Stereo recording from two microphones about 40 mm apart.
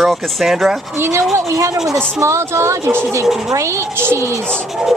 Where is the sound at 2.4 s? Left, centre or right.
Right.